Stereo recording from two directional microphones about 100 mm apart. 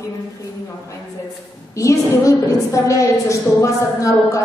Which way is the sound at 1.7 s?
30° left (ahead or behind).